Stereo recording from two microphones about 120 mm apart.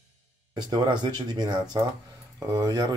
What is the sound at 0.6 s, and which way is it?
Speech, 40° right (ahead or behind).